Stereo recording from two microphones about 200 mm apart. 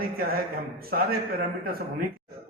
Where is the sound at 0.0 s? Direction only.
50° right (ahead or behind).